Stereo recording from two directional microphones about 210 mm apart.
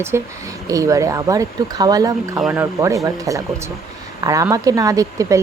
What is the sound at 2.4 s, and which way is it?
Speech, 5° right (ahead or behind).